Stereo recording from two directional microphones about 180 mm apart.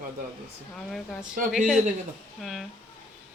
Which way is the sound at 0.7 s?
5° left (ahead or behind).